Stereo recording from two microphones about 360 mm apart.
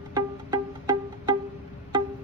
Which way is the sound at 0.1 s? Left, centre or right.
Centre.